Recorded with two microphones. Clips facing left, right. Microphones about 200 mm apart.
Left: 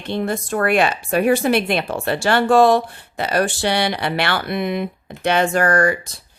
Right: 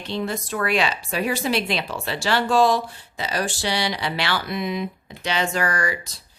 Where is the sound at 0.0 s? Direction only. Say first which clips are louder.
Left 4 dB; 55° left (ahead or behind).